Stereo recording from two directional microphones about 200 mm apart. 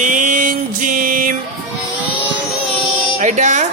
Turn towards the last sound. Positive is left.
turn(degrees=-35)  # may be behind; listen again after turning